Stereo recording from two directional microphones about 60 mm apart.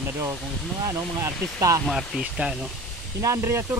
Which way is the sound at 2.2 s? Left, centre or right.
Centre.